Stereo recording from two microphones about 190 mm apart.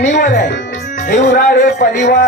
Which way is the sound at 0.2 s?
55° left (ahead or behind).